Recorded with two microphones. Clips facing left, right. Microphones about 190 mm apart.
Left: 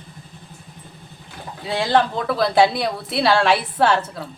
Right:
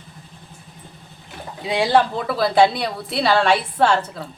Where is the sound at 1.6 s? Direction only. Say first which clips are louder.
Right 1 dB; 15° right (ahead or behind); by 4.2 s centre (ahead or behind).